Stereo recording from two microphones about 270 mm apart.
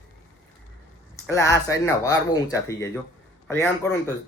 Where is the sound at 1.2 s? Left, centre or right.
Centre.